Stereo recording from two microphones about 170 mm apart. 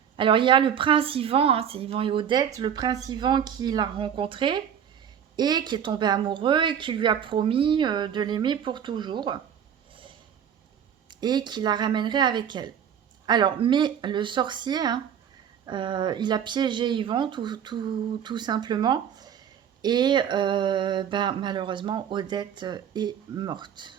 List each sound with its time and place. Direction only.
0.2 s speech: 30° right (ahead or behind)
9.9 s a sound: 30° right (ahead or behind)
11.1 s speech: 25° right (ahead or behind)